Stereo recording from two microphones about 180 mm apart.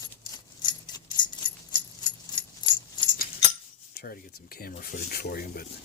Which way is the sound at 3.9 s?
55° left (ahead or behind).